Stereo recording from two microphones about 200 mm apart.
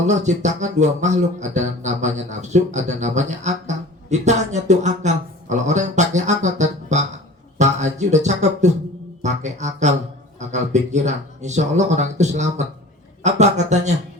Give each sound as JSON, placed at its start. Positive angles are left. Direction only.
{"t": 0.0, "sound": "a man's voice", "side_deg": -35}